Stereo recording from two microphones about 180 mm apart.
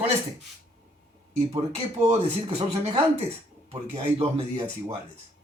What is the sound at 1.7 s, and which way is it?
Speech, 35° right (ahead or behind).